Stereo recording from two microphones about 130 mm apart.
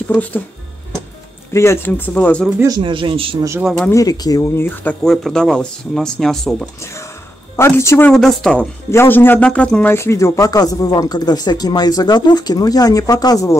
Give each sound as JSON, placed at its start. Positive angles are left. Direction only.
{"t": 0.1, "sound": "speech", "side_deg": 10}
{"t": 1.5, "sound": "speech", "side_deg": 20}
{"t": 2.8, "sound": "a man's voice", "side_deg": -40}
{"t": 3.9, "sound": "speech", "side_deg": 30}
{"t": 5.0, "sound": "speech", "side_deg": 5}
{"t": 6.8, "sound": "speech", "side_deg": 20}
{"t": 8.1, "sound": "speech", "side_deg": 5}
{"t": 8.9, "sound": "speech", "side_deg": 15}